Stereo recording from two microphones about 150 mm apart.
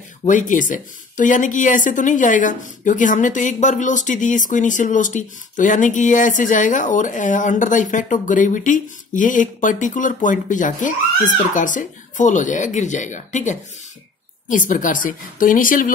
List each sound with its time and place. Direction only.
0.3 s speech: 60° left (ahead or behind)